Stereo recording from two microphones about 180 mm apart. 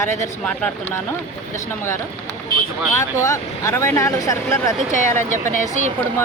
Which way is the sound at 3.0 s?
15° left (ahead or behind).